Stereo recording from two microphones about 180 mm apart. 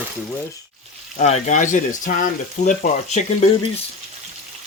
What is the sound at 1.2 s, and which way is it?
Speech, 40° left (ahead or behind).